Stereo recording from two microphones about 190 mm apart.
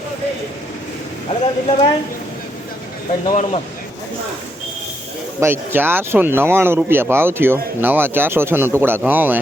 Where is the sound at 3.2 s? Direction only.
35° left (ahead or behind).